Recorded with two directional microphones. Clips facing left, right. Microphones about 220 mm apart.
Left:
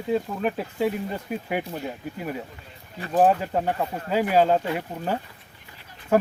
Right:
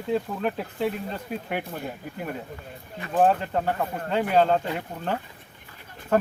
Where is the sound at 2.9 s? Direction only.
35° left (ahead or behind).